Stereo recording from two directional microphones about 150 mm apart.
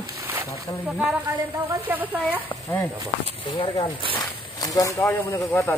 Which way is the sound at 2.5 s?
15° left (ahead or behind).